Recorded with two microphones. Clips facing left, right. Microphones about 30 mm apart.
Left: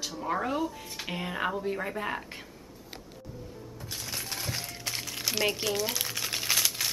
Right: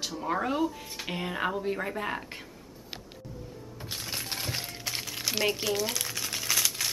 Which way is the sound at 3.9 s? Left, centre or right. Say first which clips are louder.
Right 1 dB; right.